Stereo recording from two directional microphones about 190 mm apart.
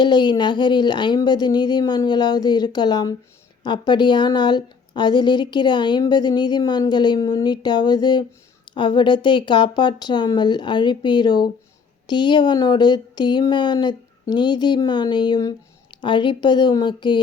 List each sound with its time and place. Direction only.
0.0 s a woman's voice: 25° left (ahead or behind)